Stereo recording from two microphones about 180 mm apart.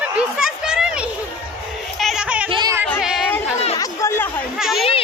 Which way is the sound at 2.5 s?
25° right (ahead or behind).